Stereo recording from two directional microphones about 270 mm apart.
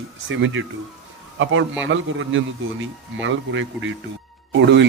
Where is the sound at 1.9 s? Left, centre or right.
Right.